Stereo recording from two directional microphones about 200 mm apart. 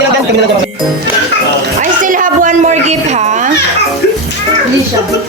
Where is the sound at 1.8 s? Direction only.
40° right (ahead or behind).